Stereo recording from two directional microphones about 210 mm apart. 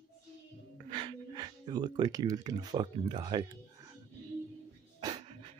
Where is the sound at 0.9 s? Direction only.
25° right (ahead or behind).